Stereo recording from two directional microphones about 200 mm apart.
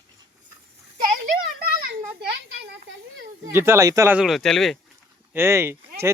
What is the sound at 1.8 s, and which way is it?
A child's voice, 55° right (ahead or behind).